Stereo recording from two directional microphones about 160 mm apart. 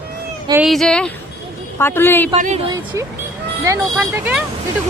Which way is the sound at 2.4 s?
50° right (ahead or behind).